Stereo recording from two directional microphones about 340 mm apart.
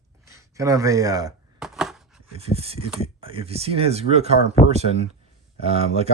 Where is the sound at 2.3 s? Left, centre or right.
Centre.